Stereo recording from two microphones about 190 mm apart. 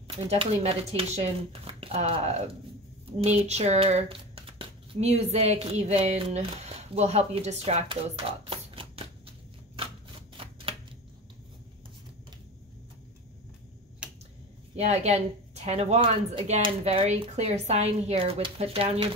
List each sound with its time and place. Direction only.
0.2 s a woman's voice: 30° right (ahead or behind)
10.3 s shuffling cards: 30° right (ahead or behind)
14.0 s finger snapping: 5° right (ahead or behind)
14.8 s a woman's voice: 35° right (ahead or behind)